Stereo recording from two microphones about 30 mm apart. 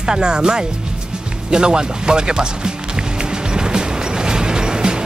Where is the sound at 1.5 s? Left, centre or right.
Right.